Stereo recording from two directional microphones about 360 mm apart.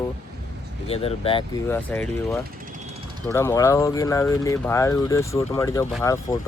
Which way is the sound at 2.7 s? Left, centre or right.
Centre.